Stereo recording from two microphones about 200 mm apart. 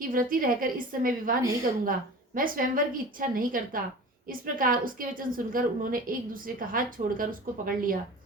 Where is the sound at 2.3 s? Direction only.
45° right (ahead or behind).